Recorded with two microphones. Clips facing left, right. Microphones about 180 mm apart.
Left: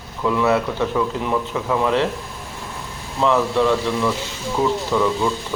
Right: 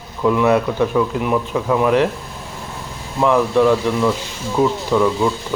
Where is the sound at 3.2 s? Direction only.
15° right (ahead or behind).